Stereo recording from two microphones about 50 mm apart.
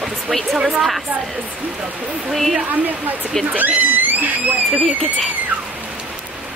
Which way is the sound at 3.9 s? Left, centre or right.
Right.